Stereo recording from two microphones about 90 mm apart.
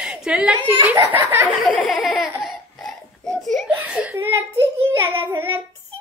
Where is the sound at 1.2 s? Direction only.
35° right (ahead or behind).